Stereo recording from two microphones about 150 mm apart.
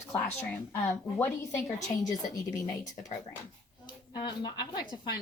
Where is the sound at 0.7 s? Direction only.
20° left (ahead or behind).